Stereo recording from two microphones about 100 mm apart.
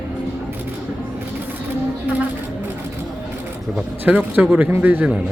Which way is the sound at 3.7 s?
15° right (ahead or behind).